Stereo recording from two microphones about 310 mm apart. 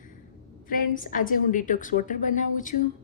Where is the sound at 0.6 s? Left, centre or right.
Left.